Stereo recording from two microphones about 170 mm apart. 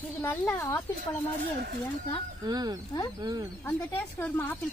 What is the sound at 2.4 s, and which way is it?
Speech, 25° right (ahead or behind).